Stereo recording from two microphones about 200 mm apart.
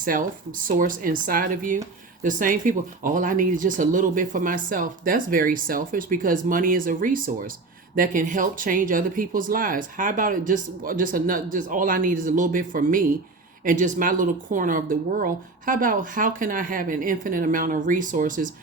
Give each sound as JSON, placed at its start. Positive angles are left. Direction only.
{"t": 0.0, "sound": "speech", "side_deg": -45}